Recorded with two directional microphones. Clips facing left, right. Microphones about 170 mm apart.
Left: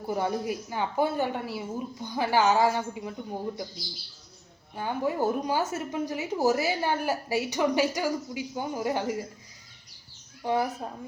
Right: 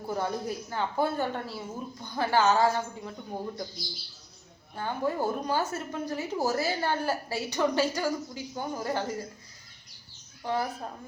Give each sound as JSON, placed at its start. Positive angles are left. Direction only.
{"t": 0.1, "sound": "a woman's voice", "side_deg": 10}
{"t": 4.7, "sound": "a woman's voice", "side_deg": 15}
{"t": 10.4, "sound": "a woman's voice", "side_deg": 15}